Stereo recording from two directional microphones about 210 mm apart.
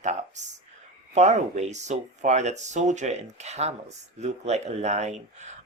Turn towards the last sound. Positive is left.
turn(degrees=-35)  # may be behind; listen again after turning